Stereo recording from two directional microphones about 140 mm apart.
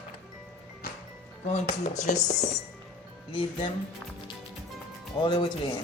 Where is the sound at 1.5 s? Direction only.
50° left (ahead or behind).